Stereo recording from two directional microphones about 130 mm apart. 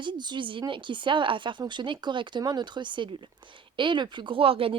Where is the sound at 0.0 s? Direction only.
35° right (ahead or behind).